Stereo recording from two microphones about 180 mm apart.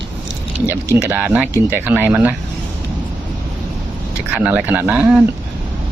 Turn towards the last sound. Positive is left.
turn(degrees=-10)  # may be behind; listen again after turning